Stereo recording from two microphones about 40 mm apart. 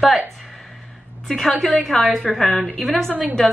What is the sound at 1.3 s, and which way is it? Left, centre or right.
Speech, centre.